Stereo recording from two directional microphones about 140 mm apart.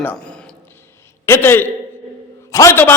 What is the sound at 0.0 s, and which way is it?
Speech, 10° left (ahead or behind).